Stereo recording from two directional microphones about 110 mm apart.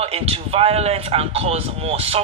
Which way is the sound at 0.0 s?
65° right (ahead or behind).